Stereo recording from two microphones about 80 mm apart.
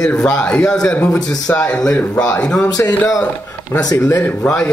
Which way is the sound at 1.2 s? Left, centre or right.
Left.